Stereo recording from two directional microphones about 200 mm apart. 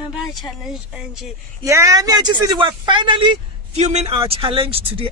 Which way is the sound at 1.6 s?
15° right (ahead or behind).